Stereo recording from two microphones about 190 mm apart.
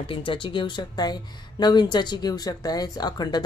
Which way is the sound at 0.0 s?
25° left (ahead or behind).